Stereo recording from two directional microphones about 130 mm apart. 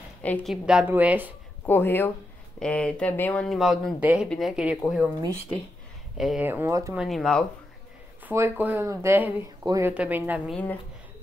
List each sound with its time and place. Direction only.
0.2 s a woman's voice: 10° left (ahead or behind)
0.5 s speech: 5° right (ahead or behind)
1.7 s speech: 15° left (ahead or behind)
3.4 s speech: centre (ahead or behind)
6.1 s speech: centre (ahead or behind)
6.4 s speech: 15° right (ahead or behind)
7.1 s speech: 5° left (ahead or behind)
8.3 s speech: 15° right (ahead or behind)
10.5 s speech: 15° left (ahead or behind)